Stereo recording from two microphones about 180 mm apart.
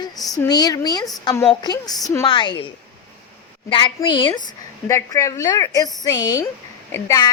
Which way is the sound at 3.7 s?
25° left (ahead or behind).